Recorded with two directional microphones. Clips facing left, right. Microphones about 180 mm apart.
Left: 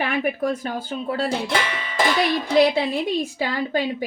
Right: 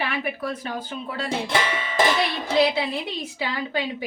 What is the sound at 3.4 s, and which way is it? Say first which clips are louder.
Speech: even; 45° left (ahead or behind).